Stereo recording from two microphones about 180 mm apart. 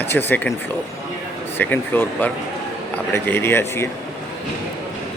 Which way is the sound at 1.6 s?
10° left (ahead or behind).